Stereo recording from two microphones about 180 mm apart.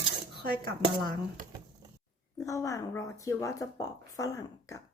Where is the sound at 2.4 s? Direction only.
15° left (ahead or behind).